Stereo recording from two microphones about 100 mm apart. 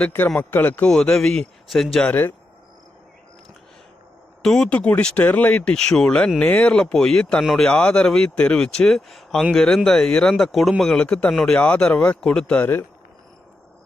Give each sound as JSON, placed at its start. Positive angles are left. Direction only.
{"t": 0.0, "sound": "speech", "side_deg": 20}
{"t": 0.9, "sound": "speech", "side_deg": 5}
{"t": 2.0, "sound": "speech", "side_deg": 20}
{"t": 4.4, "sound": "speech", "side_deg": 5}